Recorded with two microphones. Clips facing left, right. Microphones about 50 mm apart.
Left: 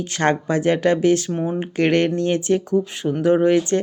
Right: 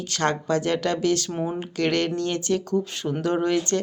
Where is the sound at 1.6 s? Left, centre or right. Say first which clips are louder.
Left 7 dB; left.